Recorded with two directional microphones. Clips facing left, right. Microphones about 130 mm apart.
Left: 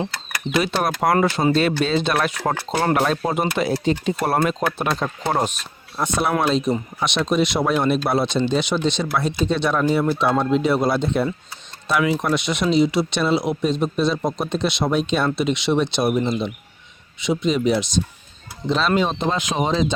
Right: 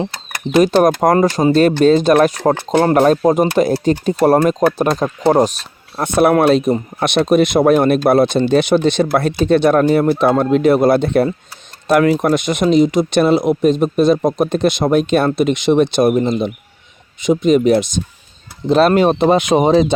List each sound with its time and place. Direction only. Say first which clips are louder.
0.5 s speech: right 10 dB; 40° right (ahead or behind)
6.0 s speech: right 9 dB; 55° right (ahead or behind)